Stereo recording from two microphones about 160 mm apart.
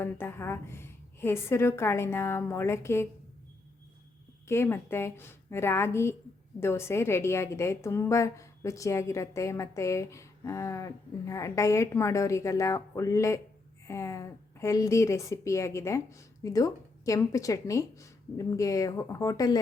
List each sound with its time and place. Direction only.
0.0 s a woman's voice: 15° left (ahead or behind)
4.4 s a woman's voice: 15° left (ahead or behind)